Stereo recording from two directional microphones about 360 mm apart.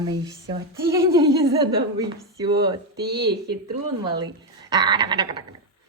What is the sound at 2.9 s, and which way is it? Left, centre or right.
Speech, right.